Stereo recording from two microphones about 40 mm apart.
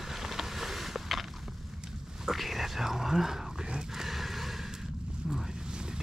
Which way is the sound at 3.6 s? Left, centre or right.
Right.